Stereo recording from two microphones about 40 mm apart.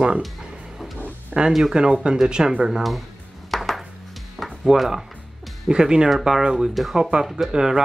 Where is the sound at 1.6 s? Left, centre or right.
Centre.